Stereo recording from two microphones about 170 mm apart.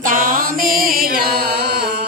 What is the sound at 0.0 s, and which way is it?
Chant, 55° right (ahead or behind).